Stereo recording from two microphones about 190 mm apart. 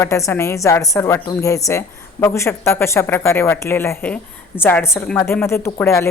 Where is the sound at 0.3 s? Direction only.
15° left (ahead or behind).